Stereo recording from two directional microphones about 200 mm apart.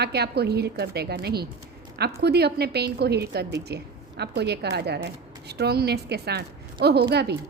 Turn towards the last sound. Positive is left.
turn(degrees=-55)  # may be behind; listen again after turning